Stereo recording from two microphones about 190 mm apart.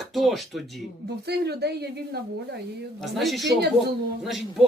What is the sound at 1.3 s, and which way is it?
Speech, 60° right (ahead or behind).